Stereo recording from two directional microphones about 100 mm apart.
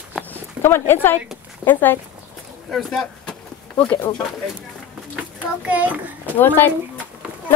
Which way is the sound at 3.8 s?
15° left (ahead or behind).